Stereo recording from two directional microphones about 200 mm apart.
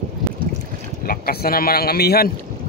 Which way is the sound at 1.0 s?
50° left (ahead or behind).